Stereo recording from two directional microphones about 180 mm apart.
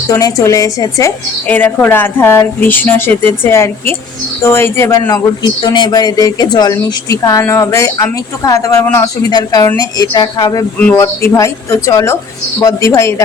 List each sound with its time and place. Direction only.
0.1 s a woman's voice: 20° left (ahead or behind)